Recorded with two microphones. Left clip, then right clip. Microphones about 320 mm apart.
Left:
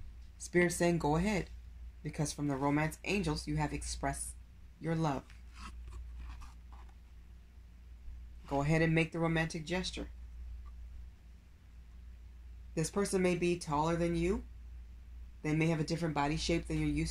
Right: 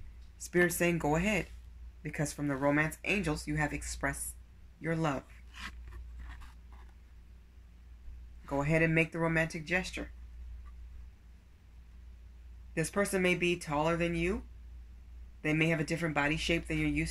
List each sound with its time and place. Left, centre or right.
0.7 s speech: centre
4.8 s writing: centre
8.6 s speech: centre
12.8 s speech: centre
15.4 s speech: centre